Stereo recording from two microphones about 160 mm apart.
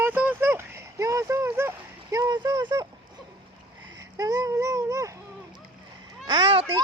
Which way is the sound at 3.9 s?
20° right (ahead or behind).